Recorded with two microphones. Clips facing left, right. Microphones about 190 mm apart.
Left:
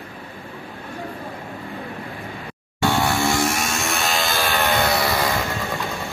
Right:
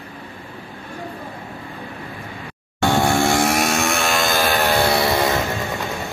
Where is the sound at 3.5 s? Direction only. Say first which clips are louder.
Right 5 dB; 65° right (ahead or behind); by 4.5 s 50° right (ahead or behind).